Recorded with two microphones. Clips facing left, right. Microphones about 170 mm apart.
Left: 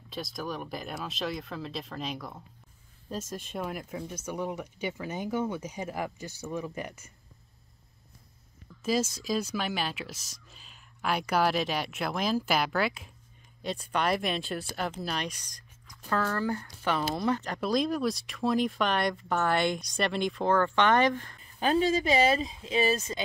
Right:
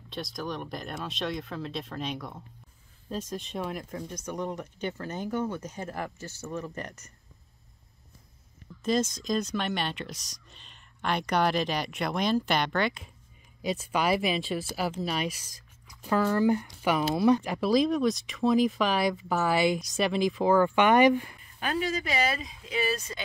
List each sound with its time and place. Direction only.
0.1 s speech: centre (ahead or behind)
8.8 s speech: 5° left (ahead or behind); by 17.6 s 10° right (ahead or behind)
17.6 s speech: centre (ahead or behind)
21.5 s speech: 25° left (ahead or behind)